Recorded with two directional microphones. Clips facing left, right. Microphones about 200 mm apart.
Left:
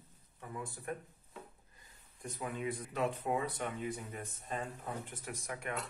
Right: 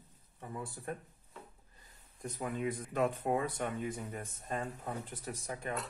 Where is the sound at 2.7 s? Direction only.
50° right (ahead or behind).